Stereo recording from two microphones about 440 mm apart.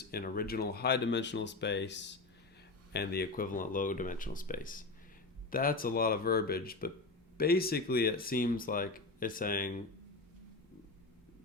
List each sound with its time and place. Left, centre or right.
0.0 s speech: left